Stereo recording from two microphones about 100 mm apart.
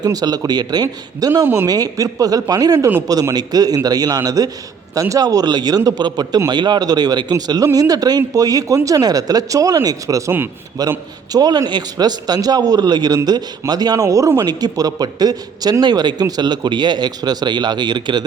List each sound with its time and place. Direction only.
0.0 s a man's voice: 40° right (ahead or behind)